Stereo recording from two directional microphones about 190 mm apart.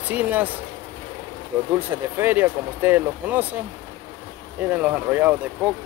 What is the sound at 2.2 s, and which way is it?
Speech, 10° right (ahead or behind).